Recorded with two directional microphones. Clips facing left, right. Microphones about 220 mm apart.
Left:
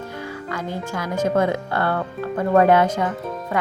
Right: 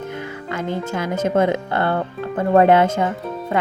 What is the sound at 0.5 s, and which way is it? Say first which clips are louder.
Speech: right 5 dB; 25° right (ahead or behind).